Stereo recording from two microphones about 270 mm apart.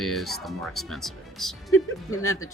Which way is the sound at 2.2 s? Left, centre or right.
Left.